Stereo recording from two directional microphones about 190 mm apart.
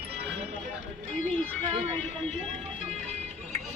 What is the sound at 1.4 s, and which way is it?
Speech, 5° left (ahead or behind).